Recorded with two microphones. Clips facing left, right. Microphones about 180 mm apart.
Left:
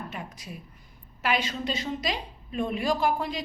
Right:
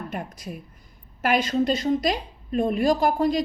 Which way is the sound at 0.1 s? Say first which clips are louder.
Right 6 dB; 50° right (ahead or behind).